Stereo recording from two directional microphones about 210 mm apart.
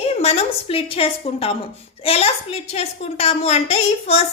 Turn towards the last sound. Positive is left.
turn(degrees=30)  # may be behind; listen again after turning